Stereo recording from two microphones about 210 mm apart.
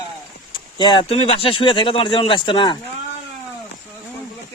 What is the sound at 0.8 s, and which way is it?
Speech, 20° left (ahead or behind).